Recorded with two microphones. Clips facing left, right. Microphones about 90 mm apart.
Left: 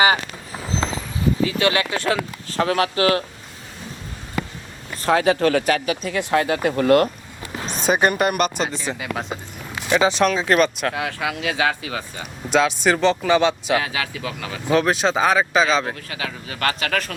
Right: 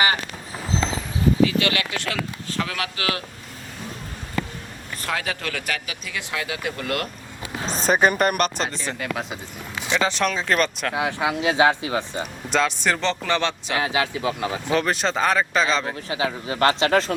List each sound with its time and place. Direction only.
1.5 s speech: 30° left (ahead or behind)
5.0 s speech: 30° left (ahead or behind)
7.9 s speech: 5° left (ahead or behind)
10.9 s speech: 20° right (ahead or behind)
12.5 s speech: 5° left (ahead or behind)
13.7 s speech: 25° right (ahead or behind)
14.7 s speech: 5° left (ahead or behind)
16.0 s speech: 25° right (ahead or behind)